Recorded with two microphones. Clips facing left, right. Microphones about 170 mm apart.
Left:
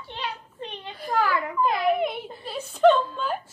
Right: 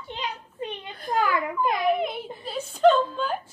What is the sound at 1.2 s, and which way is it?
Speech, 20° right (ahead or behind).